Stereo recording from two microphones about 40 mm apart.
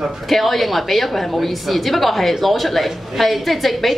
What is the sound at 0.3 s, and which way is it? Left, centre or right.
A woman's voice, centre.